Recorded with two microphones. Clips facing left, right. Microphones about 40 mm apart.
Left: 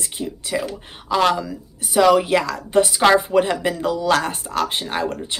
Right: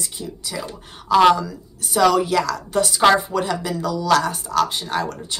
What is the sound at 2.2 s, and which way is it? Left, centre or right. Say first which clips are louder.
Speech: left 1 dB; left.